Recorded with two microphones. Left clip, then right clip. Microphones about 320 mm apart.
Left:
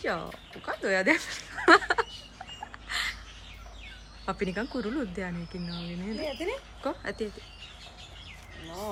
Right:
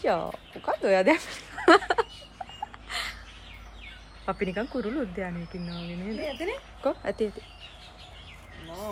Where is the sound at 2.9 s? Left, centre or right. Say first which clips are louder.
Left 3 dB; centre.